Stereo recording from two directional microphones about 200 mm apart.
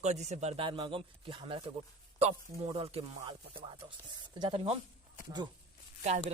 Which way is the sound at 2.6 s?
30° right (ahead or behind).